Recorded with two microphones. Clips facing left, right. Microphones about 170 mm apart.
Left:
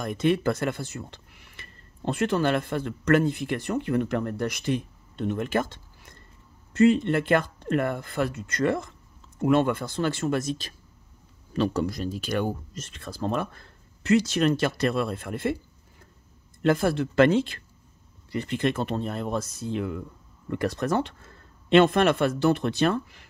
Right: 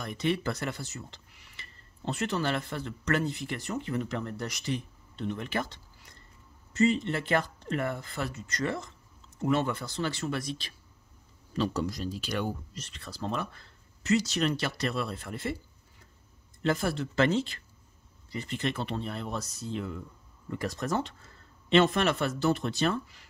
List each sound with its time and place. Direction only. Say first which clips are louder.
0.0 s speech: left 6 dB; 50° left (ahead or behind)
11.5 s speech: left 5 dB; 55° left (ahead or behind)
16.6 s speech: left 6 dB; 55° left (ahead or behind)